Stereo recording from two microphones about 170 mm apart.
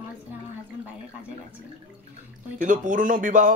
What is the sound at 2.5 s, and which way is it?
Speech, 50° right (ahead or behind).